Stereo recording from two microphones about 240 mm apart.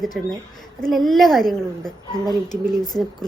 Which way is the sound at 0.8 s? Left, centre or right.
Centre.